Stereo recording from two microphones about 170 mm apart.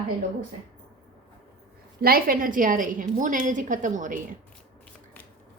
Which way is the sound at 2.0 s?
60° right (ahead or behind).